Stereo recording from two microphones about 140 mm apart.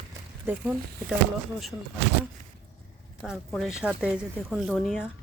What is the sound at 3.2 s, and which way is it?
Speech, centre (ahead or behind).